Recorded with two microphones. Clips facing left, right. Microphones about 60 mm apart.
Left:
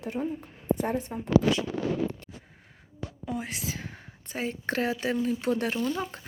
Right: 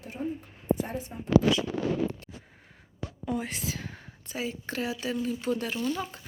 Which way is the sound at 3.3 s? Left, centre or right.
Centre.